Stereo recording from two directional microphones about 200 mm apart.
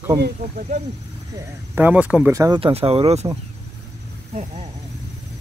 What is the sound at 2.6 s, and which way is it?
Speech, 30° right (ahead or behind).